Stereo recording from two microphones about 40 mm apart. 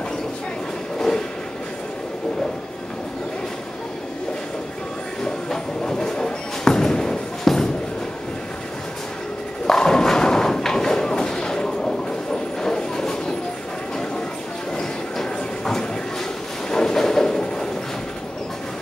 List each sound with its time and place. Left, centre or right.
0.9 s train: centre
5.2 s a sound: centre
9.7 s thump: centre
12.6 s train: centre
14.8 s train: centre
16.7 s a sound: centre